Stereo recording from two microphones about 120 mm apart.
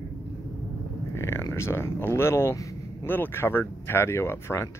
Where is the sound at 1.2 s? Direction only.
20° left (ahead or behind).